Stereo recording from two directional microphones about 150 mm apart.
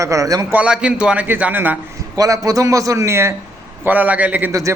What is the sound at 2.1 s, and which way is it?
A man's voice, 25° right (ahead or behind).